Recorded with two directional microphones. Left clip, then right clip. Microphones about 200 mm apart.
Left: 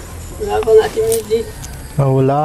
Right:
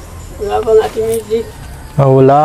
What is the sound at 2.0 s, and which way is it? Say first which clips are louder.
Speech: right 7 dB; 50° right (ahead or behind).